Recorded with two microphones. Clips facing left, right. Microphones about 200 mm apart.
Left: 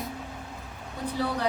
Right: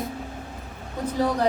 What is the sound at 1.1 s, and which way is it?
Speech, 45° right (ahead or behind).